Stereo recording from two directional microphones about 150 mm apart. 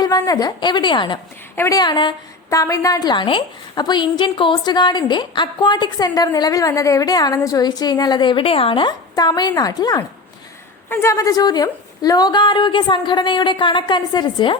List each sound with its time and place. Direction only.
0.0 s a woman's voice: 25° left (ahead or behind)
1.5 s a woman's voice: 20° left (ahead or behind)